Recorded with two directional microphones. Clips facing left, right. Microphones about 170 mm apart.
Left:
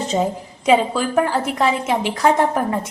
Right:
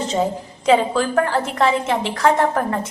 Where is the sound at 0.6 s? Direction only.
15° left (ahead or behind).